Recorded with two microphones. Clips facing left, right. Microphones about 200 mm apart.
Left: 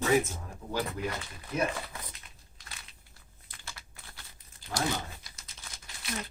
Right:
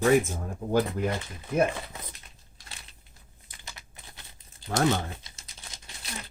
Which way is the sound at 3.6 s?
20° right (ahead or behind).